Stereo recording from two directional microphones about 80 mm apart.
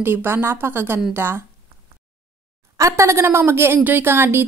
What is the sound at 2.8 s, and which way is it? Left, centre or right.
A woman's voice, right.